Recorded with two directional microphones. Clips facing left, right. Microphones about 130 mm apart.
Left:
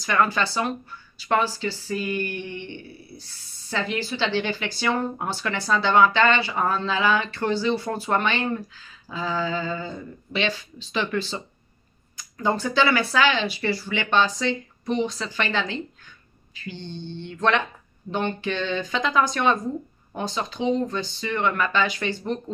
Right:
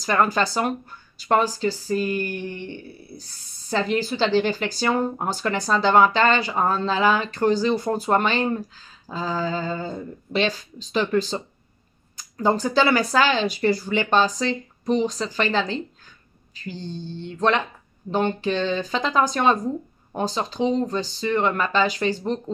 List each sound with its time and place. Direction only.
0.0 s speech: 40° right (ahead or behind)